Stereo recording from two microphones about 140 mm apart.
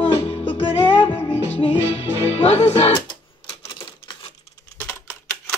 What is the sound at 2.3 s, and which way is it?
Music, 50° left (ahead or behind).